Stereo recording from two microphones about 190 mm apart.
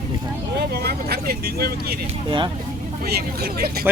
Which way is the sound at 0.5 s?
60° right (ahead or behind).